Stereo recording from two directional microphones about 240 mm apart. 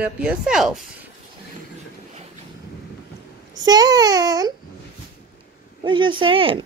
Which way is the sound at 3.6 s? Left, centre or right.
Centre.